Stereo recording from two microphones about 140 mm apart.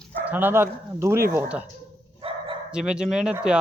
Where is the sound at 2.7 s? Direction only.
5° right (ahead or behind).